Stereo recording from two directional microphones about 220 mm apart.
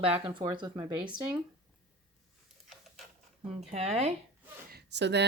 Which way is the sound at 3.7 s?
30° right (ahead or behind).